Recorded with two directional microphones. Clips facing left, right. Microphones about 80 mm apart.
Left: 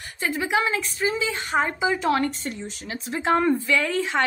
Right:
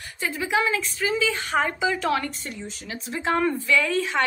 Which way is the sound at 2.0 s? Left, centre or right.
Left.